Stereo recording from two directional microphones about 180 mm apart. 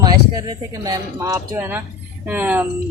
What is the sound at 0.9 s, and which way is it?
Speech, 15° right (ahead or behind).